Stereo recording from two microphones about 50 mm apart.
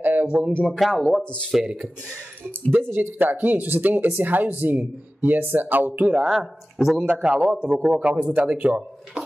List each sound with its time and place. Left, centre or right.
0.0 s a sound: right
0.7 s speech: centre
1.2 s speech: left
2.8 s speech: right
6.1 s speech: centre
7.1 s speech: right